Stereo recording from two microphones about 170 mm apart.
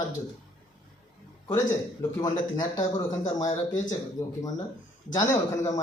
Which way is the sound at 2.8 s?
20° left (ahead or behind).